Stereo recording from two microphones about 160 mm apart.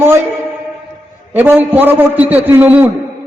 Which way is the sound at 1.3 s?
10° right (ahead or behind).